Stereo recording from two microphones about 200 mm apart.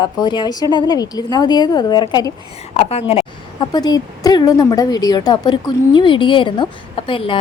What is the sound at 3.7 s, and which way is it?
A woman's voice, 20° left (ahead or behind).